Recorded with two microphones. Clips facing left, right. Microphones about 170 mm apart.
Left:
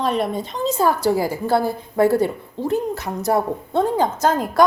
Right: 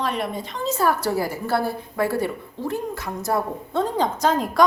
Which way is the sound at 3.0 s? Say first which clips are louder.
Left 5 dB; 70° left (ahead or behind).